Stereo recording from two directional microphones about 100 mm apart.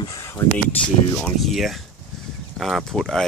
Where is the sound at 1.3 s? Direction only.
Centre (ahead or behind).